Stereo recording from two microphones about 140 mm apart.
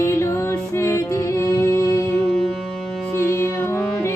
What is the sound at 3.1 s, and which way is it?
Music, 20° left (ahead or behind).